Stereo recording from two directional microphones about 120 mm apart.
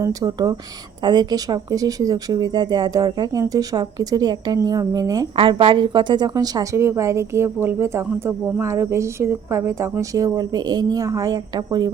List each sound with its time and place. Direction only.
0.0 s speech: 35° right (ahead or behind)
5.4 s a woman's voice: 45° right (ahead or behind)